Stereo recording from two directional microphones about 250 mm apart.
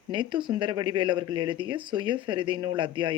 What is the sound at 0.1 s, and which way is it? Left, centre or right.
Speech, centre.